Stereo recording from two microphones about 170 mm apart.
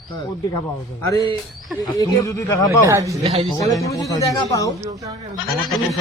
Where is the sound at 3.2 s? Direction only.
40° right (ahead or behind).